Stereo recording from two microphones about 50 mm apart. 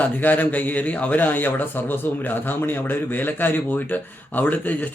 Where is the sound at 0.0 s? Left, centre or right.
Left.